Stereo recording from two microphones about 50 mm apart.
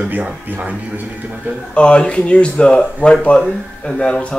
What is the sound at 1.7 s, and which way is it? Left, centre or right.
Speech, left.